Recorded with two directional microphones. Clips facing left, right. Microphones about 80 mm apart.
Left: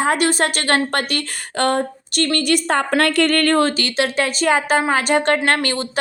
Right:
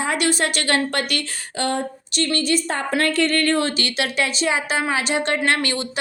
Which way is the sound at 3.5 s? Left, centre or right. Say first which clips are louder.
Left 5 dB; left.